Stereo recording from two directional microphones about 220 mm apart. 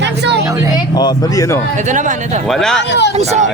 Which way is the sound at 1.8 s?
35° right (ahead or behind).